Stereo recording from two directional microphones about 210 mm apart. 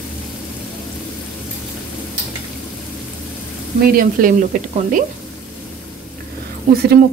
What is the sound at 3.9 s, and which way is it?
Speech, 45° right (ahead or behind).